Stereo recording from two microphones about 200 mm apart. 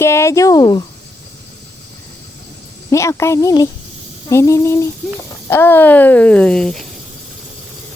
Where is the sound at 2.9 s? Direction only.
15° left (ahead or behind).